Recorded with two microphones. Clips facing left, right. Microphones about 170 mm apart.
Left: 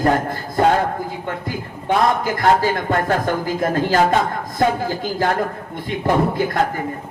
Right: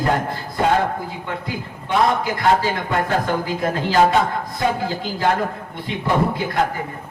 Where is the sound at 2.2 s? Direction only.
45° left (ahead or behind).